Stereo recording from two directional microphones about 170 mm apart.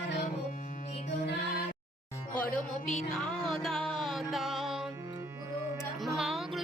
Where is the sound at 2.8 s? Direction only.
45° left (ahead or behind).